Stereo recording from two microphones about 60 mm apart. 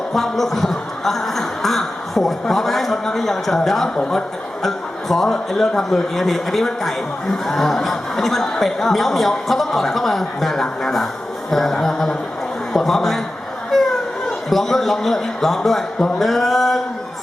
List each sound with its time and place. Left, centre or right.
0.1 s a sound: centre
3.8 s speech: centre
4.6 s a man's voice: centre